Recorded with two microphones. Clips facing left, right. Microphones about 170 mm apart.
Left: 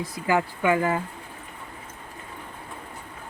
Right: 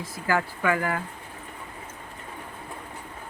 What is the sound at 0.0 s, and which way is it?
Speech, 20° left (ahead or behind).